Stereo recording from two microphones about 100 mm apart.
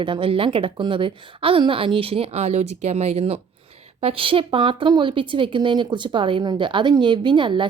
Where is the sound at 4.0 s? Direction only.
70° right (ahead or behind).